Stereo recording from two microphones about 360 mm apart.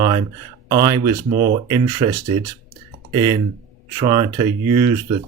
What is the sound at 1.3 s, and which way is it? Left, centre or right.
Speech, right.